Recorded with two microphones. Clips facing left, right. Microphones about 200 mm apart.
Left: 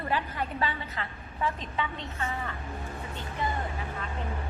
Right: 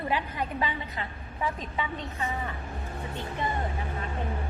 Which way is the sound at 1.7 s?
15° right (ahead or behind).